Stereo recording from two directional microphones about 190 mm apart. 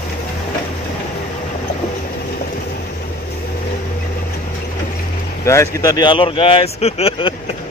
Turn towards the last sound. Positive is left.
turn(degrees=30)  # may be behind; listen again after turning